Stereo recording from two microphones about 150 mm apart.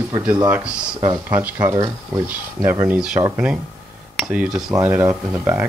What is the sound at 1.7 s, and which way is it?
Speech, 25° right (ahead or behind).